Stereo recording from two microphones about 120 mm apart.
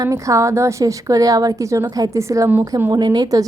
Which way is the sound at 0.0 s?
25° right (ahead or behind).